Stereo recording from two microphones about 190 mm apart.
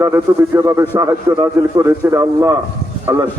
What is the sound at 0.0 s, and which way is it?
A man's voice, 15° right (ahead or behind).